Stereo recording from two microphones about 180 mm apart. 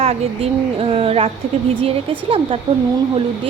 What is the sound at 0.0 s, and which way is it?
Speech, 35° right (ahead or behind).